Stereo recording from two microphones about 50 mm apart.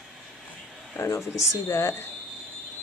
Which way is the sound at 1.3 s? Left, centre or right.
Left.